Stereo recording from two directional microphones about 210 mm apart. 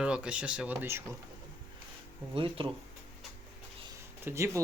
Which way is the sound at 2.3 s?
25° right (ahead or behind).